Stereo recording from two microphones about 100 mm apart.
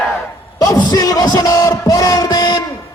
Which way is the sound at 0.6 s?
40° left (ahead or behind).